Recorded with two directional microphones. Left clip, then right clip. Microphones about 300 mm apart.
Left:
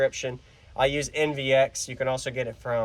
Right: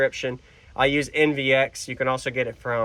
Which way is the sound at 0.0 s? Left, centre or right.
Centre.